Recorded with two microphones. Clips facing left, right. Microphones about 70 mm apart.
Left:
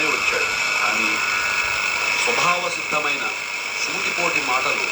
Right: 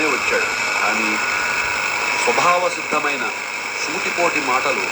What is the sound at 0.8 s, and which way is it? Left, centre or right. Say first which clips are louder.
Speech: right 3 dB; right.